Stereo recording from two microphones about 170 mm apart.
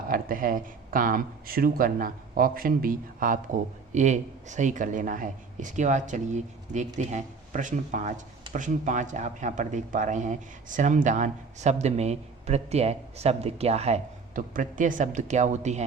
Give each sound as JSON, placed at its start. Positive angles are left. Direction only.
{"t": 0.1, "sound": "speech", "side_deg": -55}